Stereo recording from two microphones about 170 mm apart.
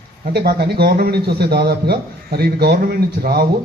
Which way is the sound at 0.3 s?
70° right (ahead or behind).